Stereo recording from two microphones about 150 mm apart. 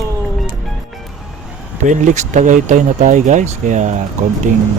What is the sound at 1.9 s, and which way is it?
Speech, 55° right (ahead or behind).